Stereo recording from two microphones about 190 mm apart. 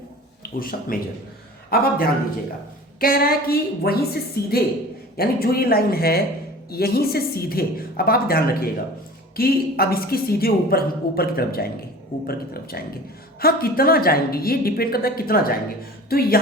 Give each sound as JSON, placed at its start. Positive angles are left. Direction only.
{"t": 0.6, "sound": "speech", "side_deg": 50}